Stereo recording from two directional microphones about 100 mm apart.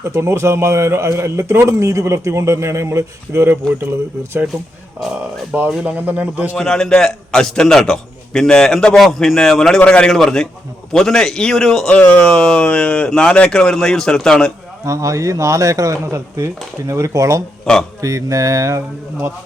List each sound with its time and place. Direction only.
0.0 s a man's voice: 30° right (ahead or behind)
5.5 s a man's voice: 10° right (ahead or behind)
6.6 s a man's voice: 5° left (ahead or behind)
14.8 s speech: 35° right (ahead or behind)
17.7 s speech: 5° left (ahead or behind)
18.0 s speech: 30° right (ahead or behind)